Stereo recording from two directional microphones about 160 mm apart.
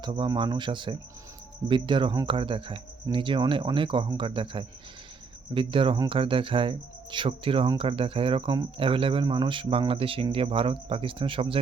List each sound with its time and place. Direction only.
0.0 s speech: 30° right (ahead or behind)